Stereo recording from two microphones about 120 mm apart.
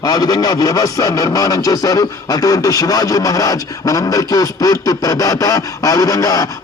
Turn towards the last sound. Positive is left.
turn(degrees=30)  # may be behind; listen again after turning